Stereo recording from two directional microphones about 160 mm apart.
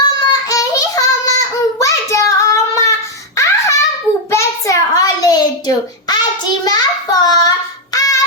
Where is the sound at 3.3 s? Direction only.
20° left (ahead or behind).